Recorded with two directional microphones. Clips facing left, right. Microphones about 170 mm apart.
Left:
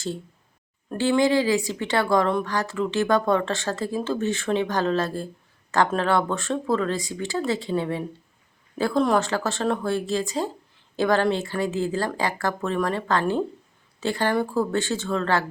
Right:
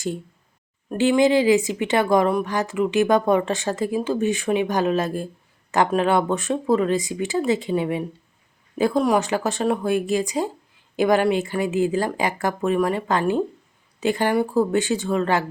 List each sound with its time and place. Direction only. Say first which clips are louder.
0.9 s speech: right 3 dB; 15° right (ahead or behind)